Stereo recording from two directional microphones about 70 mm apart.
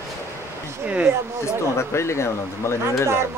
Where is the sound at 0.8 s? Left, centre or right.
Centre.